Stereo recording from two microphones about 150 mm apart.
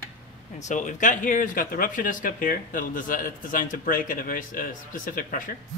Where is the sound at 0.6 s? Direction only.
55° left (ahead or behind).